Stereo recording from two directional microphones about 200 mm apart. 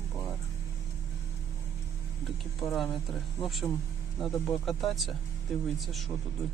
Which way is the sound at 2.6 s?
Centre (ahead or behind).